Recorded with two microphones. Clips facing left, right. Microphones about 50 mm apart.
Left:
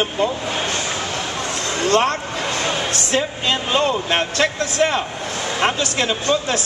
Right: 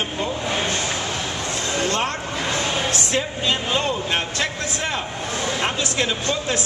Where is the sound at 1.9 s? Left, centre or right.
Left.